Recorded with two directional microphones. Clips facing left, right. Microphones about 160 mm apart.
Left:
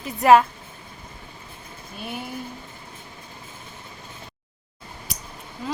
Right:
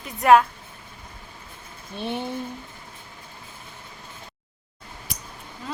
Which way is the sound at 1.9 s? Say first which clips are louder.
Right 5 dB; 25° right (ahead or behind).